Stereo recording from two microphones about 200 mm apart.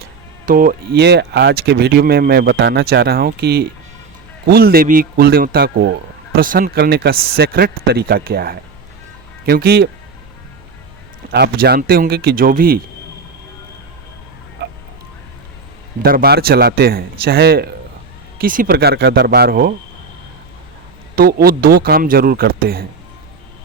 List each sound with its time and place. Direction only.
0.4 s speech: 45° right (ahead or behind)
11.3 s speech: 55° right (ahead or behind)
16.0 s speech: 50° right (ahead or behind)
21.2 s speech: 50° right (ahead or behind)